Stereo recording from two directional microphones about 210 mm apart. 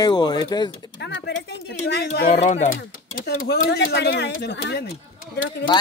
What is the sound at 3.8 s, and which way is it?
Speech, 60° left (ahead or behind).